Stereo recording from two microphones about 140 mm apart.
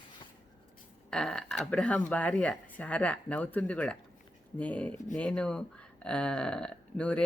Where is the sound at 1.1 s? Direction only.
5° left (ahead or behind).